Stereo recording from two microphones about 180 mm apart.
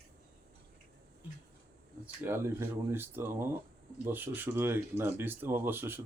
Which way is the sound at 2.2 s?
15° right (ahead or behind).